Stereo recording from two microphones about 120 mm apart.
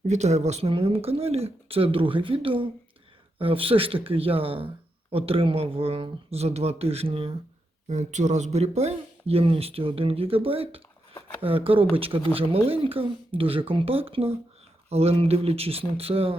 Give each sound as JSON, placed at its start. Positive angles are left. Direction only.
{"t": 0.0, "sound": "speech", "side_deg": -70}
{"t": 0.7, "sound": "speech", "side_deg": -50}
{"t": 7.9, "sound": "speech", "side_deg": -80}